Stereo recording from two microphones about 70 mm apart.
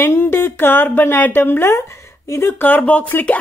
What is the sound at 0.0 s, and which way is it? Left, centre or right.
Speech, left.